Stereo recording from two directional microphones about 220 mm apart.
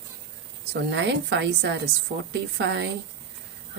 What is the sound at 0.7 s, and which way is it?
A woman's voice, 50° right (ahead or behind).